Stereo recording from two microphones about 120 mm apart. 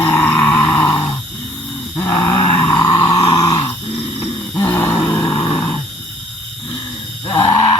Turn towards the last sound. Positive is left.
turn(degrees=30)  # may be behind; listen again after turning